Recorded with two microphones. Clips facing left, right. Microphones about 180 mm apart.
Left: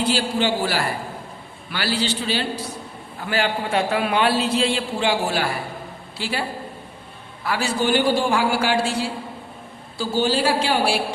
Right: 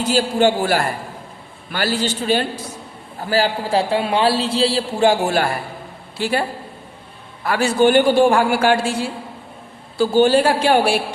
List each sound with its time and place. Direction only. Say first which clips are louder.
0.0 s a man's voice: right 5 dB; 45° right (ahead or behind)
3.2 s a man's voice: right 4 dB; 35° right (ahead or behind)
7.4 s a man's voice: right 7 dB; 55° right (ahead or behind)
10.0 s a man's voice: right 7 dB; 55° right (ahead or behind)